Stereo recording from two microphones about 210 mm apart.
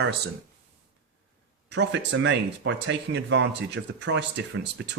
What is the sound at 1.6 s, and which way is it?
Speech, 55° right (ahead or behind).